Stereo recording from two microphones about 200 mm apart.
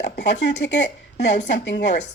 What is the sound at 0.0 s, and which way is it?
Speech, 60° left (ahead or behind).